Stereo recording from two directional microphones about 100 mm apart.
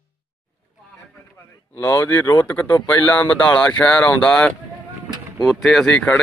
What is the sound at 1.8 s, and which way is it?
Speech, 20° left (ahead or behind).